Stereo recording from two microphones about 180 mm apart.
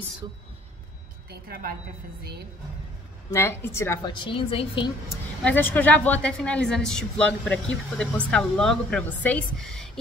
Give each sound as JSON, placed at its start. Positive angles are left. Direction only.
{"t": 1.3, "sound": "a woman's voice", "side_deg": -60}
{"t": 3.3, "sound": "a woman's voice", "side_deg": 15}
{"t": 5.4, "sound": "a woman's voice", "side_deg": 10}